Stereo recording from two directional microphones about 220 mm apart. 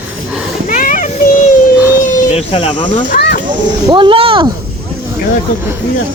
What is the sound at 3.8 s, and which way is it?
Speech, 20° right (ahead or behind).